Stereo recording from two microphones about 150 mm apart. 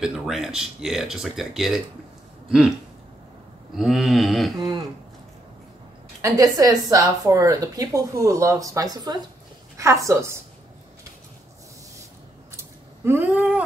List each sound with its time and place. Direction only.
0.0 s speech: centre (ahead or behind)
3.7 s speech: centre (ahead or behind)
6.2 s a woman's voice: 25° right (ahead or behind)
13.0 s cat: 15° right (ahead or behind)